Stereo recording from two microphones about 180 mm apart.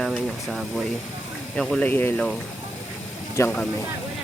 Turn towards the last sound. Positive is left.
turn(degrees=10)  # may be behind; listen again after turning